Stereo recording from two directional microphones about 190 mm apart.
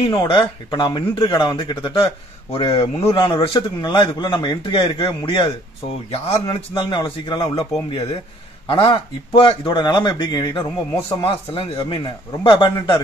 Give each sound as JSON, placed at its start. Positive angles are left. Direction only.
{"t": 0.1, "sound": "a man's voice", "side_deg": 20}